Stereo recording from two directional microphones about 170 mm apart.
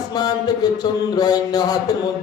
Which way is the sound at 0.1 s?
25° left (ahead or behind).